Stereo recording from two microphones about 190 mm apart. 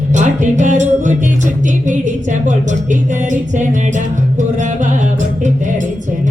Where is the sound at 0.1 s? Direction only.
40° right (ahead or behind).